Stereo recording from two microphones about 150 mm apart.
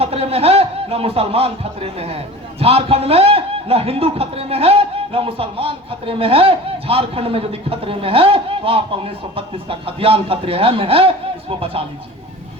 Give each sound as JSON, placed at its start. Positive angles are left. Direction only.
{"t": 0.0, "sound": "speech", "side_deg": -40}